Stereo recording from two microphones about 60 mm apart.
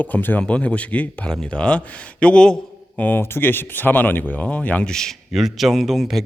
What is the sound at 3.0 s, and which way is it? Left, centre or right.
Speech, left.